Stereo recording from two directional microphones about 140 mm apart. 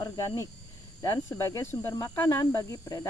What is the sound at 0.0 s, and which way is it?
Speech, 20° left (ahead or behind).